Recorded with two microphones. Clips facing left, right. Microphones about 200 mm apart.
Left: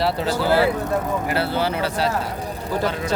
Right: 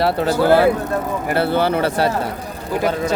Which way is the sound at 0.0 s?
55° right (ahead or behind).